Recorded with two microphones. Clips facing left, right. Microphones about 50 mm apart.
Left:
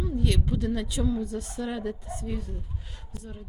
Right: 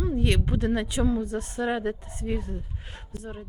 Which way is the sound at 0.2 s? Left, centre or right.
Right.